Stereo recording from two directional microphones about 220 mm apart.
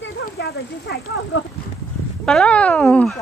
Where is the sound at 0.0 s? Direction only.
45° left (ahead or behind).